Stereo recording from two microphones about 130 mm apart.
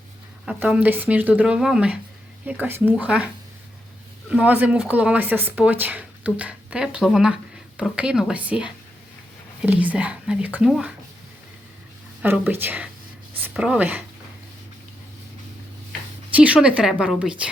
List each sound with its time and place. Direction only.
0.4 s speech: 10° right (ahead or behind)
4.3 s speech: 10° right (ahead or behind)
12.2 s speech: 15° right (ahead or behind)
16.3 s speech: 10° right (ahead or behind)